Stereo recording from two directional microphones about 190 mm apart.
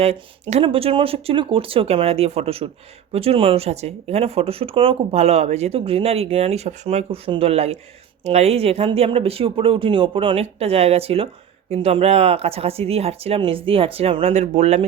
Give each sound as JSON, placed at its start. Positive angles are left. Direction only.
{"t": 0.0, "sound": "speech", "side_deg": -30}